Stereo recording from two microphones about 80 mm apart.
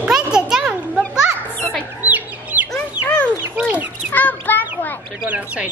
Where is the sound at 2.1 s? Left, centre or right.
Centre.